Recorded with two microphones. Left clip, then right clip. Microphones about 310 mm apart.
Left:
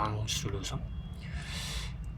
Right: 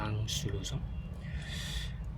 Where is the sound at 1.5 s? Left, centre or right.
Left.